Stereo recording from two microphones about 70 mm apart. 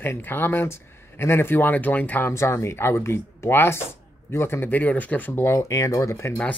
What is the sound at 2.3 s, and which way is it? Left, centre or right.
Speech, left.